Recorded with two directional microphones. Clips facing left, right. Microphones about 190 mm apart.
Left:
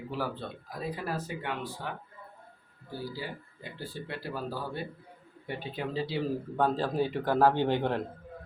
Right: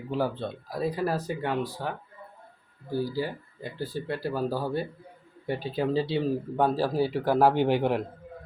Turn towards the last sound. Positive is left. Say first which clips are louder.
# right 4 dB
turn(degrees=-10)  # may be behind; listen again after turning